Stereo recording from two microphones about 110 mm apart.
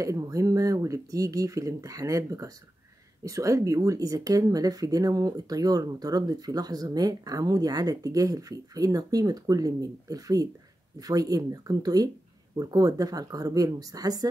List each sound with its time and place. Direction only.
0.0 s speech: 30° right (ahead or behind)